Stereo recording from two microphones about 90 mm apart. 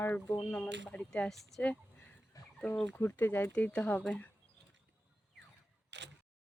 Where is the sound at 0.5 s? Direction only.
10° left (ahead or behind).